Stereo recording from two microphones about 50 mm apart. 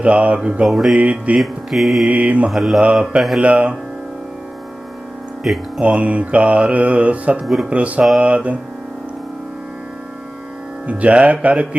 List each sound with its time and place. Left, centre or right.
0.0 s mantra: right
0.6 s mantra: centre
0.9 s mantra: right
1.4 s mantra: centre
2.0 s mantra: right
2.5 s mantra: centre
2.8 s mantra: right
3.2 s mantra: centre
3.4 s mantra: right
5.4 s speech: centre
5.8 s mantra: right
10.8 s mantra: right